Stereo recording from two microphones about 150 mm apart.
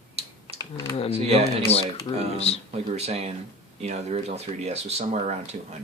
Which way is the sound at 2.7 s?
45° right (ahead or behind).